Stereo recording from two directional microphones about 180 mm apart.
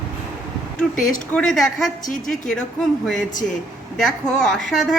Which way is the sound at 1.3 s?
5° left (ahead or behind).